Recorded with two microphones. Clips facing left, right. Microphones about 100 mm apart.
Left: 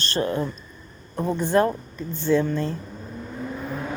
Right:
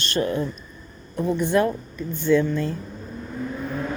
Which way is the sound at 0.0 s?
35° left (ahead or behind).